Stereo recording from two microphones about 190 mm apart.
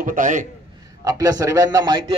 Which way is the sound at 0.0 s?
45° right (ahead or behind).